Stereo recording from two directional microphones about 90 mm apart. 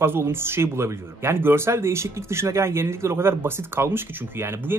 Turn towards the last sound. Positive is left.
turn(degrees=-30)  # may be behind; listen again after turning